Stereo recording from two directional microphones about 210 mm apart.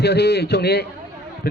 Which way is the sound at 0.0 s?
50° left (ahead or behind).